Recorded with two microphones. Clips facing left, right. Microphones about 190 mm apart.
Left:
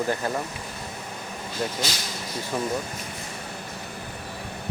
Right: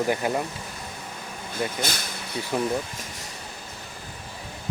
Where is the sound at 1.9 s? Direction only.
55° right (ahead or behind).